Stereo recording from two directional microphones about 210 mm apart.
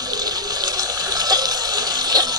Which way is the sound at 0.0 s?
20° right (ahead or behind).